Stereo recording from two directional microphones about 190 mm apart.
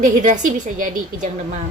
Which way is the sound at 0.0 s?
40° right (ahead or behind).